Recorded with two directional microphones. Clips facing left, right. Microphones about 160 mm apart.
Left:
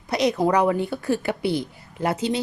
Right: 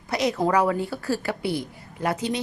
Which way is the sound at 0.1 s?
20° left (ahead or behind).